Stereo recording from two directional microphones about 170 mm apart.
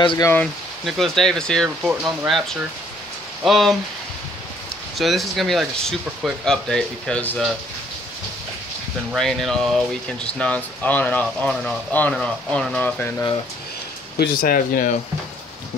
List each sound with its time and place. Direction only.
0.0 s speech: 25° left (ahead or behind)
0.3 s speech: 5° left (ahead or behind)
3.4 s speech: centre (ahead or behind)
4.9 s speech: centre (ahead or behind)
9.1 s speech: centre (ahead or behind)
14.1 s speech: 60° left (ahead or behind)